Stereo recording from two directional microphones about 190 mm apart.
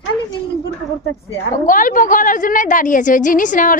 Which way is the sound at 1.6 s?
45° left (ahead or behind).